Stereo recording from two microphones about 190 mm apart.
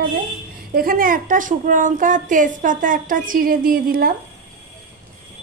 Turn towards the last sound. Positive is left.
turn(degrees=-50)  # may be behind; listen again after turning